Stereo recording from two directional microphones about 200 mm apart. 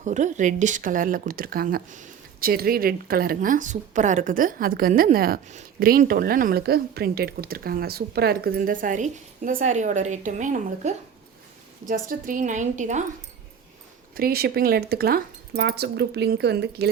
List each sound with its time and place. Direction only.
0.0 s a woman's voice: 35° right (ahead or behind)
14.2 s speech: 50° right (ahead or behind)